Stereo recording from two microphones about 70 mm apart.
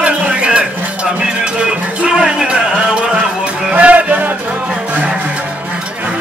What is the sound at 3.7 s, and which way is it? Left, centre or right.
Music, centre.